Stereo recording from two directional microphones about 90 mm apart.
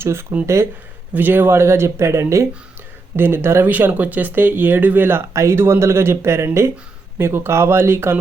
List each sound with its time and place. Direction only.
0.0 s speech: 25° right (ahead or behind)
1.1 s speech: 20° right (ahead or behind)
5.3 s speech: 30° right (ahead or behind)